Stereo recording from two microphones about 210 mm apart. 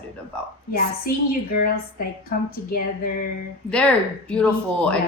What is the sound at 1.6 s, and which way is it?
Speech, 45° left (ahead or behind).